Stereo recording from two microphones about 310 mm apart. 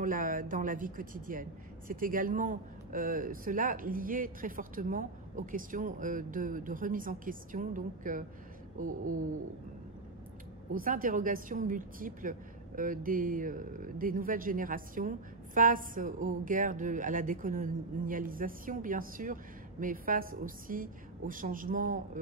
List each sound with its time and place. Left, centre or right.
0.0 s a woman's voice: right
10.7 s a woman's voice: right